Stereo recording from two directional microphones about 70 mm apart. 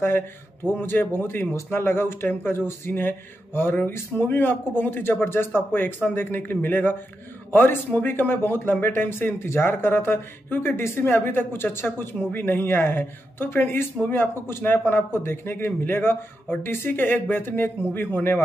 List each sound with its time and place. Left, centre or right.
0.7 s a man's voice: left